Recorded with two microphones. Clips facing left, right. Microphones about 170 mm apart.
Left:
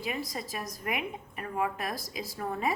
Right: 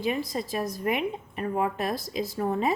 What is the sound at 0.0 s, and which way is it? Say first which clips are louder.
A woman's voice: right 7 dB; 25° right (ahead or behind).